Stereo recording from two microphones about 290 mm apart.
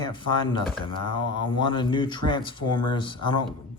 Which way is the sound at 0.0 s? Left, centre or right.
Centre.